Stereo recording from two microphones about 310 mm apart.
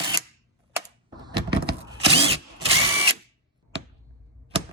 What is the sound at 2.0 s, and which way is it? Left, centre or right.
Drill, centre.